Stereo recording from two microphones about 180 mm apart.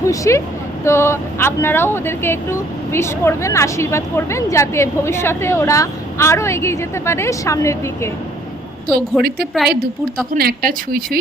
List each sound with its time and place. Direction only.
0.0 s speech: 15° left (ahead or behind)
9.5 s a woman's voice: centre (ahead or behind)
10.3 s speech: 55° right (ahead or behind)